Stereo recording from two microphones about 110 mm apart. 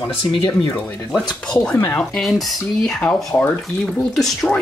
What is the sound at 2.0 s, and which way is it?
Speech, 5° left (ahead or behind).